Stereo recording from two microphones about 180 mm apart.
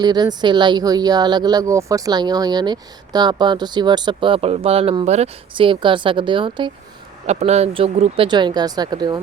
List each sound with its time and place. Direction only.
0.0 s speech: 25° right (ahead or behind)
7.3 s speech: 35° right (ahead or behind); by 9.2 s 20° right (ahead or behind)